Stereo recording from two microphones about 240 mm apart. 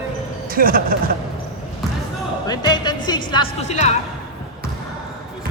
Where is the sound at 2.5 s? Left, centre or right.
Centre.